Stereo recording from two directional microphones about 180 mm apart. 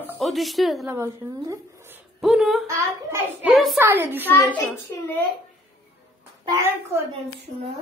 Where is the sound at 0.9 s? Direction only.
15° right (ahead or behind).